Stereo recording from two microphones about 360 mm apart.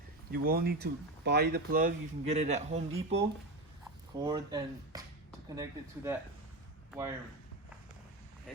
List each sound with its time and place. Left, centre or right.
0.3 s speech: right; by 7.2 s centre